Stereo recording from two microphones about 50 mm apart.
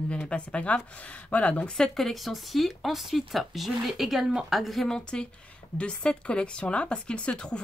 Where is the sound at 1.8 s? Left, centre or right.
Centre.